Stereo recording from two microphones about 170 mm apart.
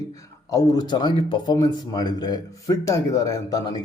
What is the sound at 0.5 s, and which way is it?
Speech, 25° left (ahead or behind).